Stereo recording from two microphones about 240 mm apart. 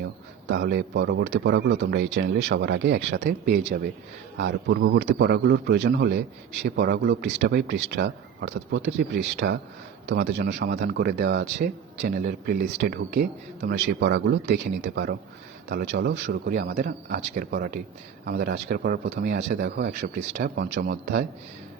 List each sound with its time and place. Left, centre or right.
0.4 s a man's voice: right